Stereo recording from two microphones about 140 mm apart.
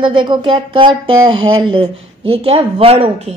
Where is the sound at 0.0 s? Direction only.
35° right (ahead or behind).